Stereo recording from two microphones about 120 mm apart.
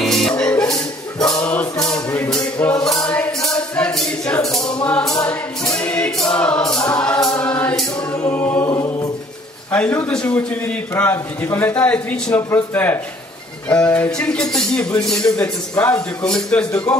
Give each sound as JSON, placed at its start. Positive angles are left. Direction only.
{"t": 0.0, "sound": "music", "side_deg": 5}
{"t": 4.8, "sound": "a man's voice", "side_deg": 5}
{"t": 7.0, "sound": "music", "side_deg": 10}
{"t": 8.2, "sound": "a man's voice", "side_deg": 15}
{"t": 8.6, "sound": "choir", "side_deg": 30}
{"t": 9.7, "sound": "a man's voice", "side_deg": 15}